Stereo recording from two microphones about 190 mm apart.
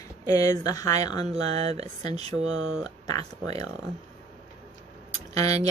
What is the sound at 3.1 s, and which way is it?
Speech, 20° left (ahead or behind).